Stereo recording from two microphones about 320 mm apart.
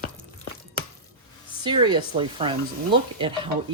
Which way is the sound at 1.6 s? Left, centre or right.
Centre.